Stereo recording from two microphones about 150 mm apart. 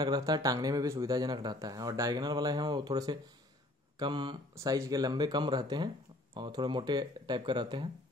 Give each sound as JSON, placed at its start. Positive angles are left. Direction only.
{"t": 0.0, "sound": "speech", "side_deg": -25}